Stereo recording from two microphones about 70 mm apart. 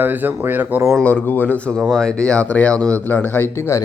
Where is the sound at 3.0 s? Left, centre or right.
Left.